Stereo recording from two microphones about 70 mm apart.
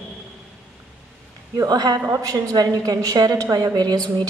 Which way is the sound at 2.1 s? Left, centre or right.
Right.